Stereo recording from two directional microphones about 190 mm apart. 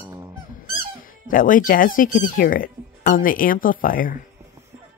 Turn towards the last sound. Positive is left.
turn(degrees=45)  # may be behind; listen again after turning